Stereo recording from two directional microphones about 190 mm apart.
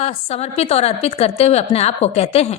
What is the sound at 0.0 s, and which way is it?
A woman's voice, 35° left (ahead or behind).